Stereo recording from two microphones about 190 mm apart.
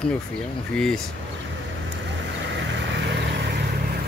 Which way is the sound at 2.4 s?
70° right (ahead or behind).